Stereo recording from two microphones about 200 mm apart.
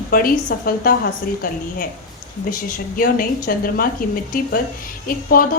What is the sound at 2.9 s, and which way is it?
Speech, 45° left (ahead or behind).